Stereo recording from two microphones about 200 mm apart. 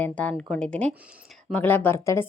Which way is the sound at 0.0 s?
5° left (ahead or behind).